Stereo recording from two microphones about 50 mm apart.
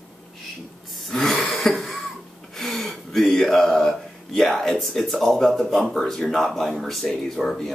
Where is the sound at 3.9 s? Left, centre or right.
Centre.